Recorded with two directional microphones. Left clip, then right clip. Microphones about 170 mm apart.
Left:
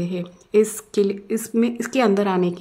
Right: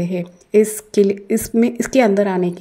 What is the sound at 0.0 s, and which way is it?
A woman's voice, 10° right (ahead or behind).